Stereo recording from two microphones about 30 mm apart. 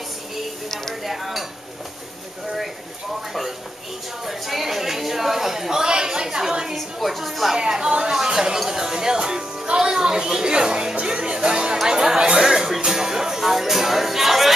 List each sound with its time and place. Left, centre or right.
1.0 s dishes: centre
4.3 s a woman's voice: centre
6.7 s speech: centre
7.5 s speech: right
11.1 s music: right
11.3 s music: right